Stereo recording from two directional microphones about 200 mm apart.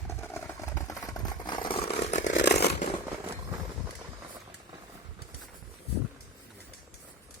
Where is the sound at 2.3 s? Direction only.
60° left (ahead or behind).